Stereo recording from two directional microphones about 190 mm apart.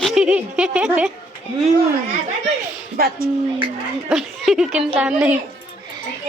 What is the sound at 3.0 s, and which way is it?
Speech, 55° right (ahead or behind).